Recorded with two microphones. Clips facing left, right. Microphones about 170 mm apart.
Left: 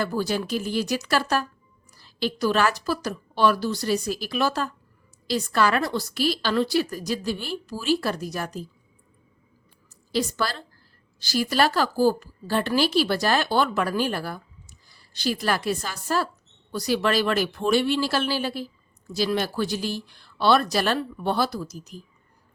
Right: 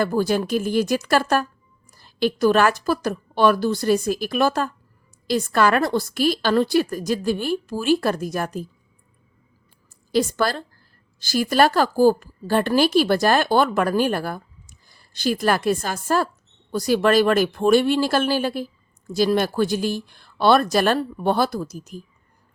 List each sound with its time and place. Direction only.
0.0 s a woman's voice: 50° right (ahead or behind)
10.1 s a woman's voice: 50° right (ahead or behind)